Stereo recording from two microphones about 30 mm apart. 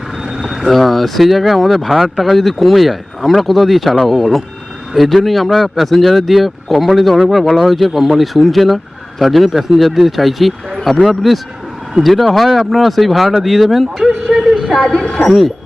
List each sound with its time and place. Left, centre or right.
0.7 s speech: centre
9.5 s a man's voice: centre
14.3 s a sound: centre
14.8 s speech: centre